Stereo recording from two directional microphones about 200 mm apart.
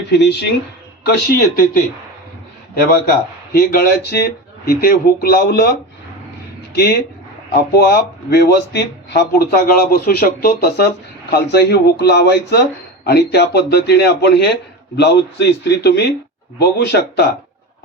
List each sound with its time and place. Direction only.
0.1 s a man's voice: 55° left (ahead or behind)
3.5 s speech: 50° left (ahead or behind)
6.7 s a man's voice: 55° left (ahead or behind)